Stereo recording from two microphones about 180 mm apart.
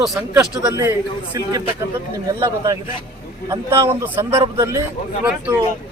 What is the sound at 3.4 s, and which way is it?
A man's voice, 20° right (ahead or behind).